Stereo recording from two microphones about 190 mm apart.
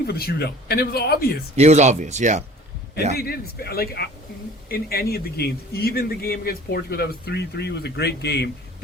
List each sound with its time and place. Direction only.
0.1 s a man's voice: 55° left (ahead or behind)
1.5 s speech: 35° right (ahead or behind)
3.2 s a man's voice: 55° left (ahead or behind)